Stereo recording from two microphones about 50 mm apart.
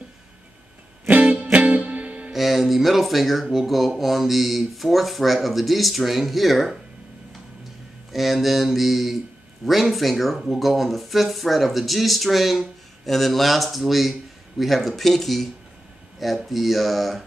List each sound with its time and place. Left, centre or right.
1.0 s music: right
2.3 s speech: centre
8.1 s speech: centre
16.4 s speech: centre